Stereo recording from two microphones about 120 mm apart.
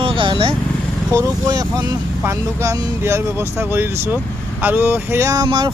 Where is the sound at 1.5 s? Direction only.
30° right (ahead or behind).